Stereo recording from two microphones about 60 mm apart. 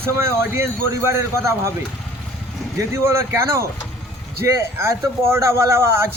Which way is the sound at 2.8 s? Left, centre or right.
Right.